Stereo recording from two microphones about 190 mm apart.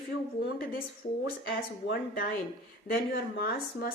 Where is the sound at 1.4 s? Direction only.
50° left (ahead or behind).